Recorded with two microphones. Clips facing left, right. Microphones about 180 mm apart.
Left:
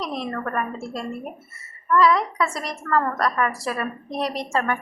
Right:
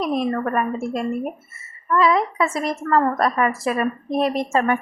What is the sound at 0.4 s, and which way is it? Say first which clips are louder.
A woman's voice: right 5 dB; 20° right (ahead or behind).